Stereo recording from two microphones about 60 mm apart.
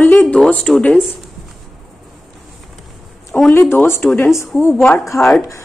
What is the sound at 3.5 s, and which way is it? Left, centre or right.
Speech, left.